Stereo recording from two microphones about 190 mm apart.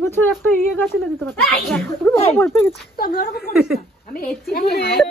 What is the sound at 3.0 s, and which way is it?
Speech, 50° left (ahead or behind).